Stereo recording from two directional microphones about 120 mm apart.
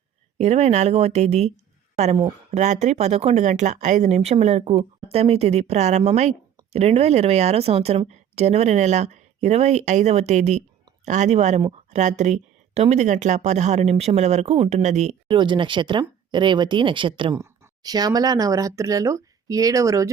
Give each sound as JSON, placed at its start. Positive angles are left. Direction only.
{"t": 0.3, "sound": "speech", "side_deg": -60}
{"t": 2.5, "sound": "speech", "side_deg": -70}
{"t": 15.3, "sound": "speech", "side_deg": -40}
{"t": 17.3, "sound": "a sound", "side_deg": -25}
{"t": 17.9, "sound": "speech", "side_deg": -30}